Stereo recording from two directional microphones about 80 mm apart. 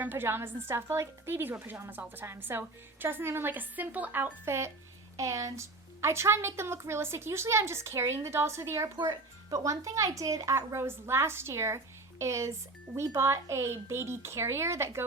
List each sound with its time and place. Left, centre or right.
0.0 s a woman's voice: right